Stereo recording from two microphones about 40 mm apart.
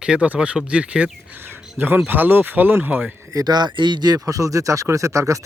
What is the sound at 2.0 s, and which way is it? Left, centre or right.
Speech, right.